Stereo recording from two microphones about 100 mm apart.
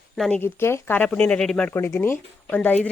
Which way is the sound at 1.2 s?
10° left (ahead or behind).